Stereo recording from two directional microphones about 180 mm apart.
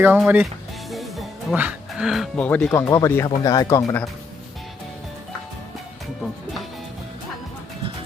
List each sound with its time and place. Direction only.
0.0 s speech: 10° right (ahead or behind)
0.9 s music: centre (ahead or behind)
2.8 s speech: 20° left (ahead or behind)